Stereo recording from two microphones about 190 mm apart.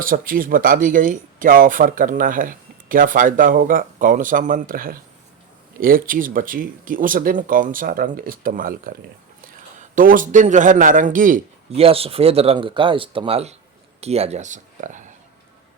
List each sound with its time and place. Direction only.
0.0 s speech: 45° right (ahead or behind)
11.8 s speech: 30° right (ahead or behind)